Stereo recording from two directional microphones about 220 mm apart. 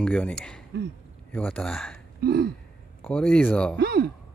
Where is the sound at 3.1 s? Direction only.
5° left (ahead or behind).